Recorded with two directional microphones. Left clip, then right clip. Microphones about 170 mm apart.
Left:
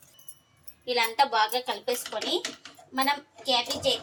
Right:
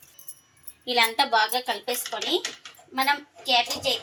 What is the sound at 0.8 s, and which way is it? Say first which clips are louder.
A woman's voice: right 2 dB; 30° right (ahead or behind).